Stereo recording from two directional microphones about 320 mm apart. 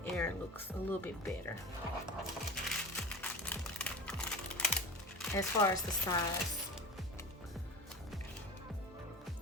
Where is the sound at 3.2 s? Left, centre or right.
Centre.